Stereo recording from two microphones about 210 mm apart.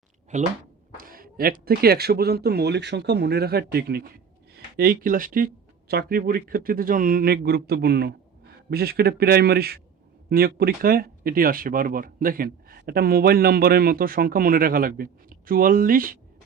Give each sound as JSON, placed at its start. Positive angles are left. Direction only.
{"t": 0.3, "sound": "speech", "side_deg": -35}